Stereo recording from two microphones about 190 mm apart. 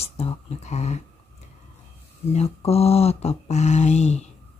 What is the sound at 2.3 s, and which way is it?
Speech, 35° left (ahead or behind).